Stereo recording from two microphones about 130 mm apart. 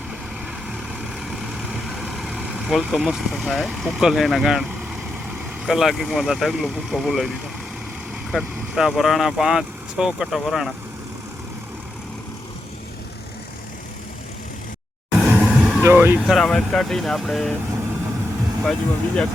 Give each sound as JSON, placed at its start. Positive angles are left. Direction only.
{"t": 1.7, "sound": "speech", "side_deg": -5}
{"t": 5.6, "sound": "speech", "side_deg": 0}
{"t": 8.3, "sound": "speech", "side_deg": -5}
{"t": 15.1, "sound": "music", "side_deg": -5}
{"t": 15.5, "sound": "vehicle", "side_deg": 0}
{"t": 15.8, "sound": "speech", "side_deg": -20}
{"t": 16.2, "sound": "speech", "side_deg": 0}
{"t": 18.6, "sound": "speech", "side_deg": 5}